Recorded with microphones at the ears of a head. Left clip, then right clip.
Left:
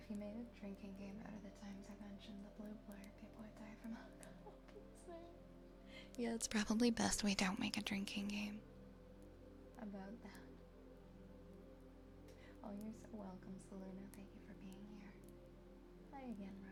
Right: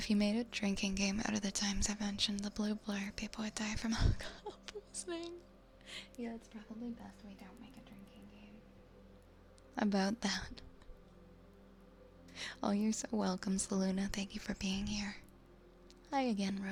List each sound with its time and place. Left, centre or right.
0.0 s speech: right
6.4 s speech: left
9.7 s speech: right
12.4 s speech: right